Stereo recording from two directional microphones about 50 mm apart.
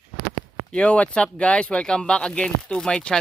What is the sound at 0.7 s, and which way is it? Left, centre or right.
Speech, left.